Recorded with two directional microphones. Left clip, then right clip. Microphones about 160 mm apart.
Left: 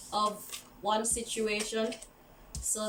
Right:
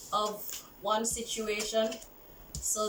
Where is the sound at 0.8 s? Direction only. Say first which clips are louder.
Even; 15° left (ahead or behind).